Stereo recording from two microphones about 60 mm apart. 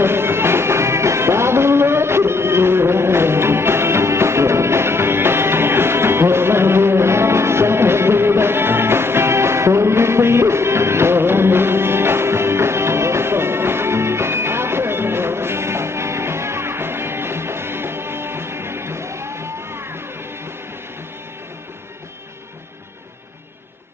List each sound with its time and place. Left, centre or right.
0.0 s music: right